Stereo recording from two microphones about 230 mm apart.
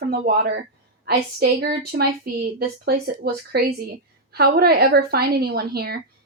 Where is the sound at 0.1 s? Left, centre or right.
Right.